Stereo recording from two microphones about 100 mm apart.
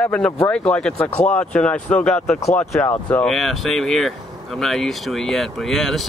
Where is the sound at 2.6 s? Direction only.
25° left (ahead or behind).